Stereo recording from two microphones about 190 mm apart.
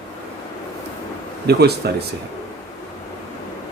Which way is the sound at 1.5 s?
60° right (ahead or behind).